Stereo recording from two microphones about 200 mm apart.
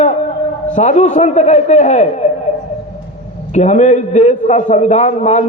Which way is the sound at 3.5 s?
35° left (ahead or behind).